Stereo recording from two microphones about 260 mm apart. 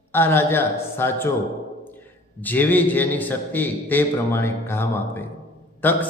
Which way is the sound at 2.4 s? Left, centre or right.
Centre.